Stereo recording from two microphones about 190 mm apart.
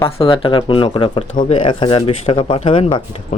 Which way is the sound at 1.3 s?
40° left (ahead or behind).